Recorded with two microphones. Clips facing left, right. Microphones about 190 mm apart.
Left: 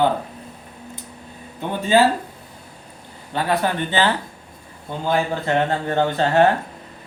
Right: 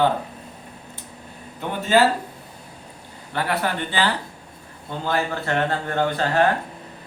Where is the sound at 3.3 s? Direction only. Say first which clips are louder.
Left 3 dB; 20° left (ahead or behind).